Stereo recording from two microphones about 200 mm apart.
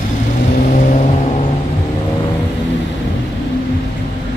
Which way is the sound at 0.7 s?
40° left (ahead or behind).